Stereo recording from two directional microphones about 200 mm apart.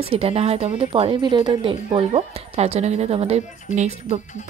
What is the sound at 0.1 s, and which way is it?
Speech, 30° right (ahead or behind).